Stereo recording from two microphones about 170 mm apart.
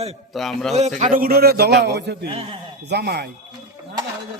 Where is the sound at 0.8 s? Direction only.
45° right (ahead or behind); by 2.3 s 80° right.